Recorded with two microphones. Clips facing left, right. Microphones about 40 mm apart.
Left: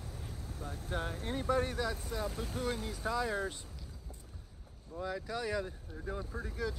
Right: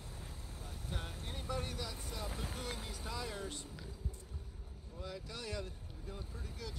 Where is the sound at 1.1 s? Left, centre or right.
Centre.